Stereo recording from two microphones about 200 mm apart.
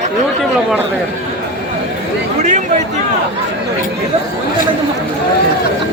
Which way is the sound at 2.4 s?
35° right (ahead or behind).